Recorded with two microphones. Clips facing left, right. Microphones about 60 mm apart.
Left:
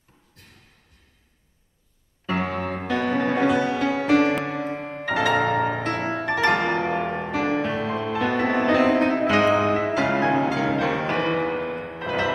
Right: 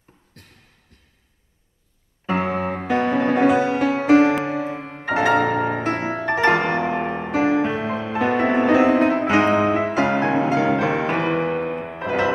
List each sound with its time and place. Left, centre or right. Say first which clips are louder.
2.2 s music: right 4 dB; centre
3.3 s music: right 5 dB; centre
4.7 s music: left 1 dB; centre
5.0 s music: right 3 dB; right
5.7 s music: right 2 dB; centre
6.1 s piano: right 3 dB; right
6.7 s music: right 2 dB; centre
8.1 s music: right 4 dB; right